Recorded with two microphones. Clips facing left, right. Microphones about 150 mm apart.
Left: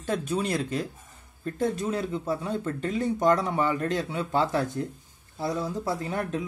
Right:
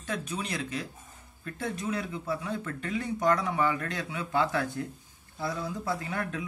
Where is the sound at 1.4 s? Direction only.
35° left (ahead or behind).